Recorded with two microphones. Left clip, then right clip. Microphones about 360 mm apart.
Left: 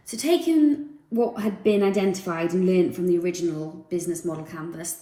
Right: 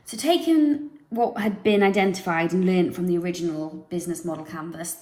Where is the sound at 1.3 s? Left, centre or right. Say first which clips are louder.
Right 1 dB; right.